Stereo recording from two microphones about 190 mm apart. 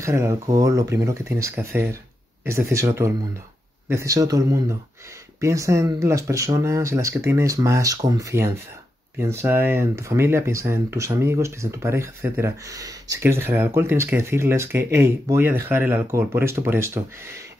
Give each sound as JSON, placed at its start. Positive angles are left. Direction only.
{"t": 0.0, "sound": "speech", "side_deg": -15}